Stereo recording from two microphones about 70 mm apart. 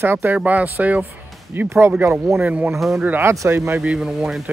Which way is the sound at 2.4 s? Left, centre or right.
Right.